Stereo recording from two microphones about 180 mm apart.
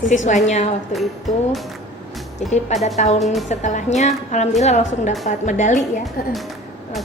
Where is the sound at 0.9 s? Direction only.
Centre (ahead or behind).